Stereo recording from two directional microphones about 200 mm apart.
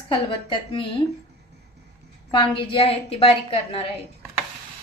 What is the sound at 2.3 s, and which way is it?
A woman's voice, 25° left (ahead or behind).